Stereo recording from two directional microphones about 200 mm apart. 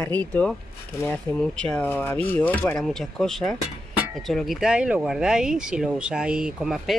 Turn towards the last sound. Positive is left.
turn(degrees=0)  # may be behind; listen again after turning